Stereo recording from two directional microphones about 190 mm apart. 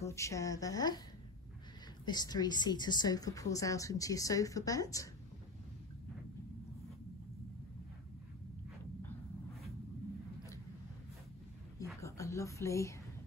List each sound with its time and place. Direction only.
0.0 s a woman's voice: 15° left (ahead or behind)
2.0 s a woman's voice: 20° left (ahead or behind)
12.0 s a sound: 15° left (ahead or behind)